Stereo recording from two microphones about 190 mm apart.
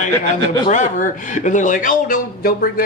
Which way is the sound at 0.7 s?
40° left (ahead or behind).